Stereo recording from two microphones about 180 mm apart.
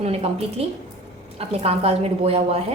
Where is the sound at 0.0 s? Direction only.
35° right (ahead or behind).